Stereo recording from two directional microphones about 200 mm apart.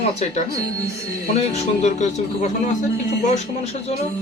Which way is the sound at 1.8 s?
35° left (ahead or behind).